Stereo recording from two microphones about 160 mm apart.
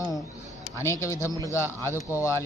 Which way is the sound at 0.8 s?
20° left (ahead or behind).